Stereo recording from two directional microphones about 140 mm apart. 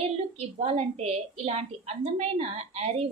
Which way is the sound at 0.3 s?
45° right (ahead or behind).